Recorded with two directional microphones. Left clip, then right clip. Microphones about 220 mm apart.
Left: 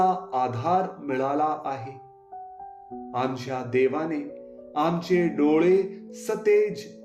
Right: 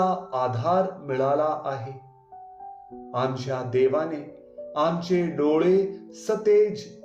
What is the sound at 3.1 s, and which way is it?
Speech, 30° left (ahead or behind).